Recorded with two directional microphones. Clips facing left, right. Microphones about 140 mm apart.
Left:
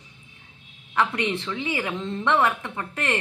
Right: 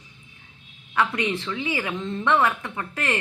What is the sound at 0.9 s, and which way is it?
A woman's voice, 30° left (ahead or behind).